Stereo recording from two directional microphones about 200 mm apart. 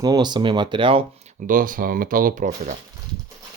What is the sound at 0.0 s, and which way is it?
Speech, 20° right (ahead or behind).